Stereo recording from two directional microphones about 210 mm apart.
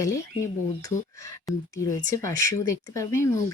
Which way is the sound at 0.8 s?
15° left (ahead or behind).